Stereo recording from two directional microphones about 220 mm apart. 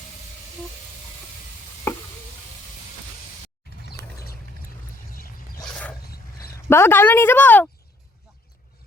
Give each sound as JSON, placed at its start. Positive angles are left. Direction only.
{"t": 3.8, "sound": "mechanisms", "side_deg": 45}
{"t": 6.7, "sound": "a woman's voice", "side_deg": 10}